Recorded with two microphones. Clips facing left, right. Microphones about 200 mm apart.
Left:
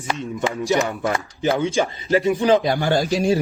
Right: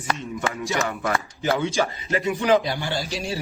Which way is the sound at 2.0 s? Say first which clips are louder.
Left 7 dB; 35° left (ahead or behind).